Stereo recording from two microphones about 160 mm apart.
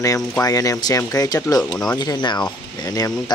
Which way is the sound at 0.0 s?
20° left (ahead or behind).